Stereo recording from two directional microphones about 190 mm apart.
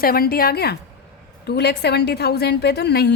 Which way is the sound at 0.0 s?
50° left (ahead or behind).